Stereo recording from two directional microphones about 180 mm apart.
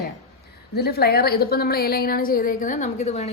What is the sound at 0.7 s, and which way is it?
A woman's voice, 60° left (ahead or behind).